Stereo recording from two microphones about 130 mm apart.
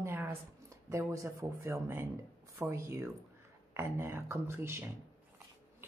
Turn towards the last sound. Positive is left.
turn(degrees=-20)  # may be behind; listen again after turning